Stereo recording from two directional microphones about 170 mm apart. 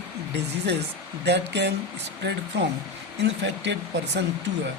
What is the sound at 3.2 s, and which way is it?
Speech, 90° right.